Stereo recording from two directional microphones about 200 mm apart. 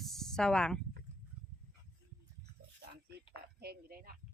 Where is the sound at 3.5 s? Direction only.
50° right (ahead or behind).